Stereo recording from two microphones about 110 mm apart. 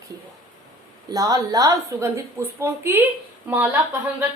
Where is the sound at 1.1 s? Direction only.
35° right (ahead or behind).